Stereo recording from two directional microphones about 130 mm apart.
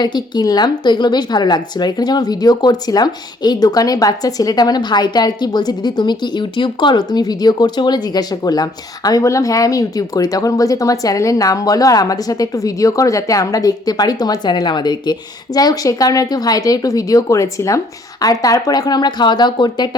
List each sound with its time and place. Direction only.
0.0 s speech: 35° left (ahead or behind)